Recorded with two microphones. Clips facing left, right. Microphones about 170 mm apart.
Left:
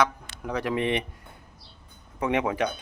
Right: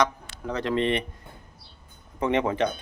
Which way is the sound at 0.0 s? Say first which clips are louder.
Even; 10° left (ahead or behind).